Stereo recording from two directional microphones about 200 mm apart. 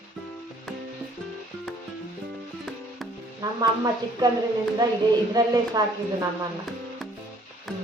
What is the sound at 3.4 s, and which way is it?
Speech, 20° right (ahead or behind).